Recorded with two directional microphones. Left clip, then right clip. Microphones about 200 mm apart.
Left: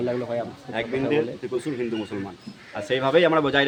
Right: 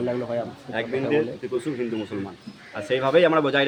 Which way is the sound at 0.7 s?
20° left (ahead or behind).